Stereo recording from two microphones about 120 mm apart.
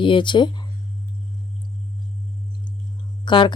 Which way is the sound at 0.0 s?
45° left (ahead or behind).